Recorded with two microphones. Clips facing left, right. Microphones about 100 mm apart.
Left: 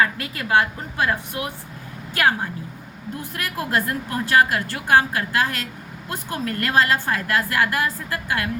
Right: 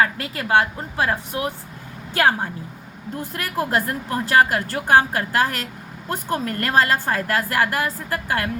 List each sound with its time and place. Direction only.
0.0 s a woman's voice: 30° right (ahead or behind)